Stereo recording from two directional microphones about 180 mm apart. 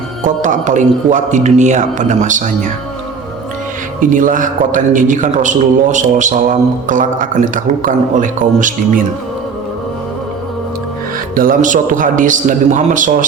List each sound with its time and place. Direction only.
0.4 s a man's voice: 45° right (ahead or behind)
4.1 s a man's voice: 45° right (ahead or behind)
11.3 s a man's voice: 50° right (ahead or behind)